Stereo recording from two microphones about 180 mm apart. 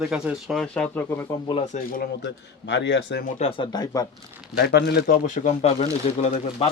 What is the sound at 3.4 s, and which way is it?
Speech, 30° left (ahead or behind).